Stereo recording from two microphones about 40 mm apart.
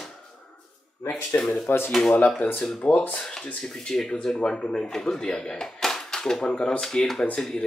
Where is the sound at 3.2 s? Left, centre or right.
Centre.